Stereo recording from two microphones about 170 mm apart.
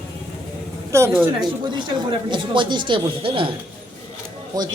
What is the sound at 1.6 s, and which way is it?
A man's voice, 25° right (ahead or behind).